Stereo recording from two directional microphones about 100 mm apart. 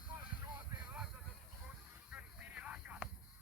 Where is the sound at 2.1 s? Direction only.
15° right (ahead or behind).